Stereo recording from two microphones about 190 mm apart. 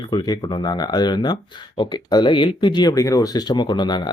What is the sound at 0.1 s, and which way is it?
Speech, 20° left (ahead or behind).